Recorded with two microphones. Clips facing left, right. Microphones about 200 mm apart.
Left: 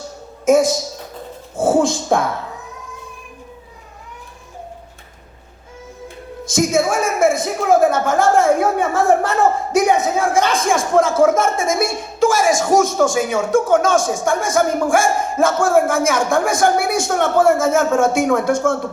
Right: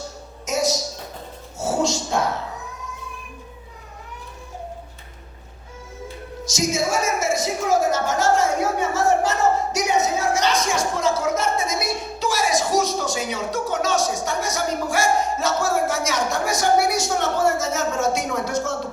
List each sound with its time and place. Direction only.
0.4 s a woman's voice: 55° left (ahead or behind)
6.4 s a woman's voice: 55° left (ahead or behind)